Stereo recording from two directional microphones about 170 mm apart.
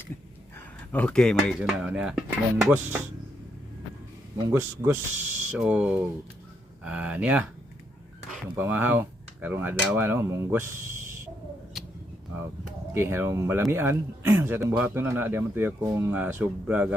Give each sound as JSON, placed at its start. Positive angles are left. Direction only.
{"t": 0.9, "sound": "speech", "side_deg": 5}
{"t": 4.4, "sound": "speech", "side_deg": -15}
{"t": 8.5, "sound": "speech", "side_deg": -10}
{"t": 11.8, "sound": "a sound", "side_deg": 0}
{"t": 12.9, "sound": "speech", "side_deg": -15}